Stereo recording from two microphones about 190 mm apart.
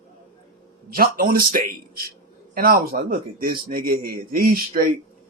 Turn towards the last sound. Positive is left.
turn(degrees=-50)  # may be behind; listen again after turning